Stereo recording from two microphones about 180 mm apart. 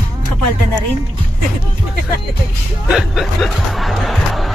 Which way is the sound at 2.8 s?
Centre (ahead or behind).